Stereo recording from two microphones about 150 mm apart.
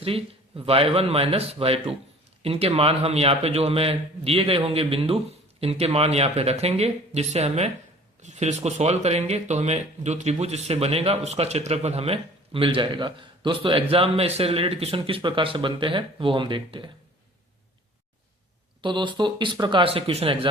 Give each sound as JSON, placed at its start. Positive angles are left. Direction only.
{"t": 0.0, "sound": "speech", "side_deg": -40}
{"t": 18.8, "sound": "speech", "side_deg": -30}